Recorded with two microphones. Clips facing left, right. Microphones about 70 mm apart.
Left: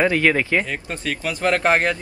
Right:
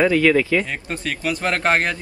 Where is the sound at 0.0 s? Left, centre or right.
Left.